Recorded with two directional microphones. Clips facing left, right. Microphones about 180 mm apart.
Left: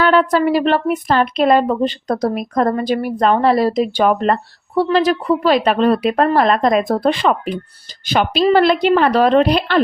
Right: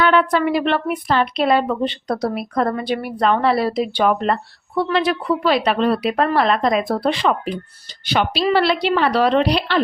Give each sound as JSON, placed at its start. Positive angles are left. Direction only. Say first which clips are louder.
{"t": 0.0, "sound": "a woman's voice", "louder": "left 3 dB", "side_deg": 40}